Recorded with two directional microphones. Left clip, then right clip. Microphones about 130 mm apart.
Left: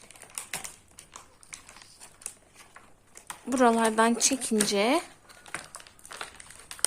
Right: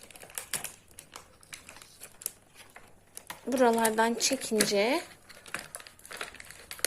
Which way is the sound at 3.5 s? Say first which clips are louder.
Left 2 dB; 20° left (ahead or behind).